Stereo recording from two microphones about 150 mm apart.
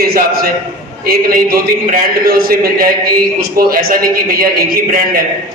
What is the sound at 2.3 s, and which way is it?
A man's voice, 85° right.